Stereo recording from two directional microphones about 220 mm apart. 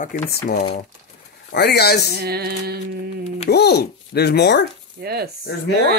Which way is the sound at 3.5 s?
50° left (ahead or behind).